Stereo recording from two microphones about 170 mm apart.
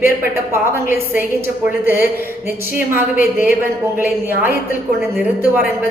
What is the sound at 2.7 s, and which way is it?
A woman's voice, 15° right (ahead or behind).